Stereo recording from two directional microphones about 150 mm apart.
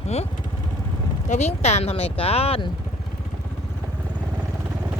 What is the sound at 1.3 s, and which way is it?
Speech, 50° left (ahead or behind).